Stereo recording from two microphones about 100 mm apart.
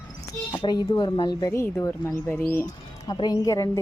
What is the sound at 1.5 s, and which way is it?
Speech, 25° left (ahead or behind).